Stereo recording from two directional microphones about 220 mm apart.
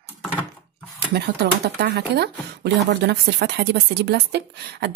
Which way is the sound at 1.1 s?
50° right (ahead or behind).